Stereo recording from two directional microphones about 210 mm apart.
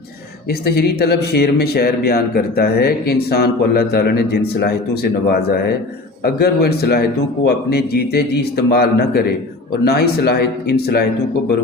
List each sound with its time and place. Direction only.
0.6 s speech: 50° left (ahead or behind)